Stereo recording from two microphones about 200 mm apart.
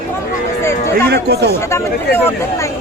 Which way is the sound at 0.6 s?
15° left (ahead or behind).